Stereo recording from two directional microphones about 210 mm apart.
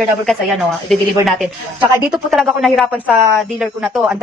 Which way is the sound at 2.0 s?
Centre (ahead or behind).